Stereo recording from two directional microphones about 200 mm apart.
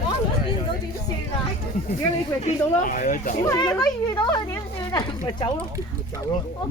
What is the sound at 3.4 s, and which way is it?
Speech, 15° left (ahead or behind).